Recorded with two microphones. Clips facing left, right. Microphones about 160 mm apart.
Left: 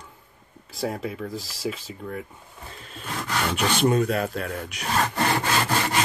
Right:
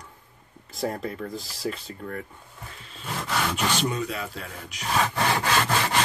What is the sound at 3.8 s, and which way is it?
Speech, 50° left (ahead or behind).